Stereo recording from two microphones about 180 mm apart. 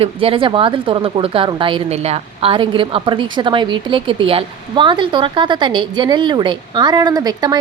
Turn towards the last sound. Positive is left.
turn(degrees=-20)  # may be behind; listen again after turning